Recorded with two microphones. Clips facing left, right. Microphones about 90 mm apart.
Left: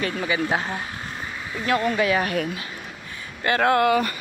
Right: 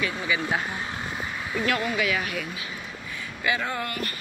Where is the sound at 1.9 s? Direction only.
35° left (ahead or behind).